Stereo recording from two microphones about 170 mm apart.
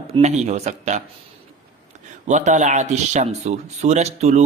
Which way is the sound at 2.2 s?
45° right (ahead or behind).